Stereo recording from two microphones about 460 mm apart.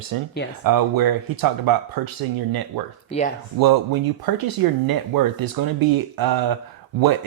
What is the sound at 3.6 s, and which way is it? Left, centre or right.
Speech, right.